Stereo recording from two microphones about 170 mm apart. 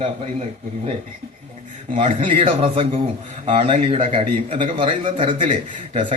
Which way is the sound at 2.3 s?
35° right (ahead or behind).